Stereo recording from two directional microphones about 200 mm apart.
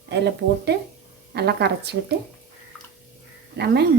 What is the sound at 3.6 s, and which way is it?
Frying, 55° right (ahead or behind).